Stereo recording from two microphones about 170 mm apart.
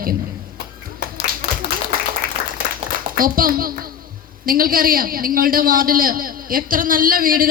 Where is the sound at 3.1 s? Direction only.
55° right (ahead or behind).